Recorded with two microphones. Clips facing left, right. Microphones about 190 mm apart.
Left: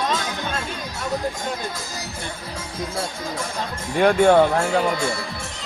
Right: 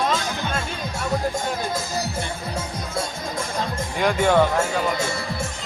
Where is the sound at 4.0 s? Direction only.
55° left (ahead or behind).